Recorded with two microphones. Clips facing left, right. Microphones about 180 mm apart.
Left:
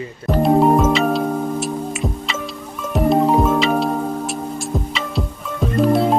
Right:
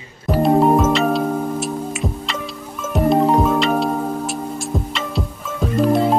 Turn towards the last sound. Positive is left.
turn(degrees=0)  # may be behind; listen again after turning